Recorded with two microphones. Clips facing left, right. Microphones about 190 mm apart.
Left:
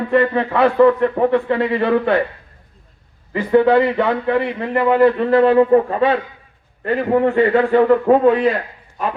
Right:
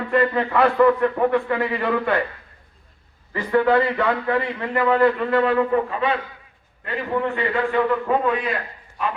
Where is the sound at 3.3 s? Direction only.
20° left (ahead or behind).